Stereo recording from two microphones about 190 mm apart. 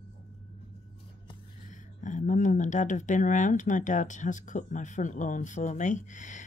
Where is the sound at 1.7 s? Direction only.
40° left (ahead or behind).